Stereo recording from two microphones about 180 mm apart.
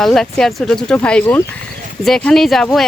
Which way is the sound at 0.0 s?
Centre (ahead or behind).